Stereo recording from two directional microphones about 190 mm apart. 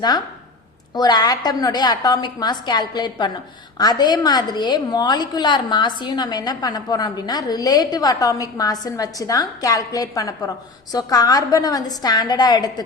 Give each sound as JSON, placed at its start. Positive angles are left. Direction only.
{"t": 0.9, "sound": "a woman's voice", "side_deg": 20}